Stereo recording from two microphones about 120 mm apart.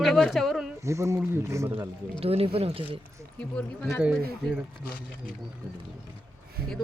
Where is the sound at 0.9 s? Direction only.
25° right (ahead or behind).